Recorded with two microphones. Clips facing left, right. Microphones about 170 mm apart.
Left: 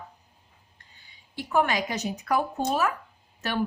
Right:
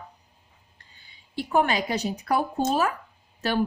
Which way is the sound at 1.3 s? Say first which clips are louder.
Right 2 dB; 30° right (ahead or behind).